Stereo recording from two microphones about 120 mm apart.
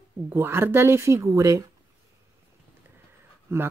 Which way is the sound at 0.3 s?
20° right (ahead or behind).